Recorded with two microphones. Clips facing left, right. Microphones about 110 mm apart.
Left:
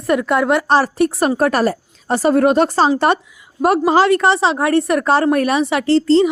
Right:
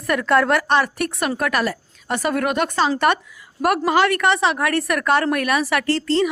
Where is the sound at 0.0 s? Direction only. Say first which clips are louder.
Left 2 dB; 20° left (ahead or behind).